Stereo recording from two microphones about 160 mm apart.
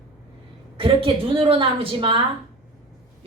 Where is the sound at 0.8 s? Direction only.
35° right (ahead or behind).